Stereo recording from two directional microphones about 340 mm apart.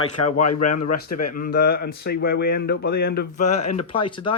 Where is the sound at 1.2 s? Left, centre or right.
Left.